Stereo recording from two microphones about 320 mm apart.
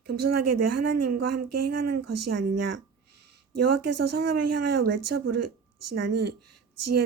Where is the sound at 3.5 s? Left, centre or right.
Right.